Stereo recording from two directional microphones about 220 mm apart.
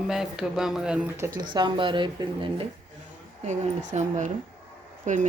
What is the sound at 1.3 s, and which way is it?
Speech, 20° right (ahead or behind).